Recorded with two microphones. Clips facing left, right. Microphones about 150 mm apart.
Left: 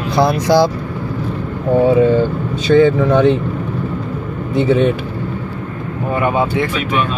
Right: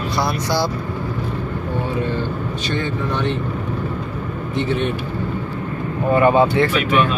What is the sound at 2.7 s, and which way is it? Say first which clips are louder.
Speech: left 15 dB; 90° left.